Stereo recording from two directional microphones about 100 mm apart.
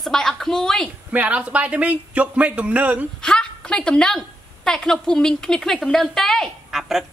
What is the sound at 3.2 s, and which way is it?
A woman's voice, 10° left (ahead or behind).